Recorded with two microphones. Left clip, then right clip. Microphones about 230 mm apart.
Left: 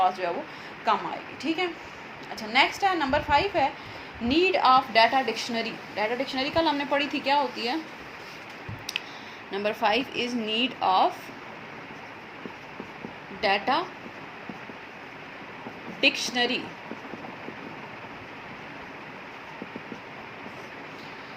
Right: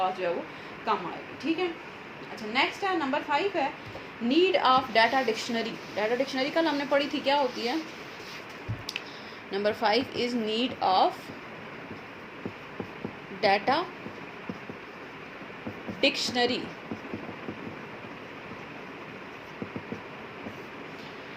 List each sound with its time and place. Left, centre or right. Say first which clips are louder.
0.2 s speech: left 1 dB; left
9.5 s speech: left 1 dB; left
13.4 s speech: even; left
16.0 s speech: left 2 dB; left